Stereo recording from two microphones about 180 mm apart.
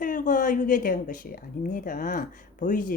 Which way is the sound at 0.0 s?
50° left (ahead or behind).